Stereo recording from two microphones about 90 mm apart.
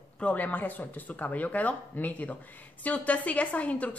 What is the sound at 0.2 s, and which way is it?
A woman's voice, 15° left (ahead or behind).